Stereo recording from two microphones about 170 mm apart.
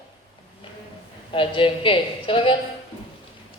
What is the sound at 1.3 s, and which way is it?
A woman's voice, 30° left (ahead or behind).